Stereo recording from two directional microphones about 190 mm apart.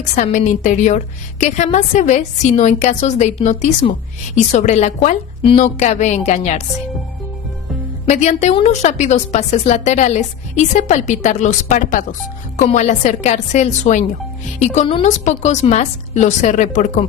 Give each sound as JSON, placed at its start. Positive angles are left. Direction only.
{"t": 0.2, "sound": "a woman's voice", "side_deg": 40}
{"t": 8.0, "sound": "a woman's voice", "side_deg": 40}